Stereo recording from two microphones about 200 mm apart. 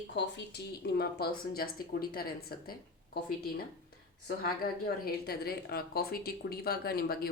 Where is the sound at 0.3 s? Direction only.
50° left (ahead or behind).